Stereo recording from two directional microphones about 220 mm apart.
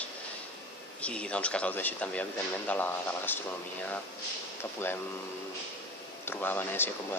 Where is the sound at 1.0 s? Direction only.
5° left (ahead or behind).